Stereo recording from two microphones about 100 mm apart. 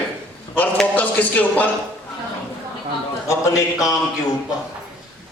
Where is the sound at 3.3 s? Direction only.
35° left (ahead or behind).